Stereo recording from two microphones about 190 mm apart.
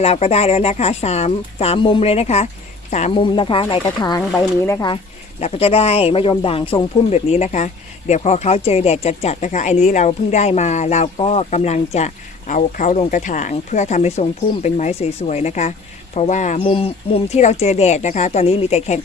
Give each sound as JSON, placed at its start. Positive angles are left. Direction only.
{"t": 0.0, "sound": "speech", "side_deg": 30}
{"t": 5.4, "sound": "speech", "side_deg": 30}